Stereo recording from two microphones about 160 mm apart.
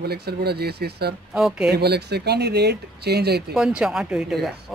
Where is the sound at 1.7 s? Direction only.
90° right.